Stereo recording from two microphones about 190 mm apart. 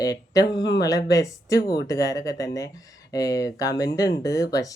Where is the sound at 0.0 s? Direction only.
20° left (ahead or behind).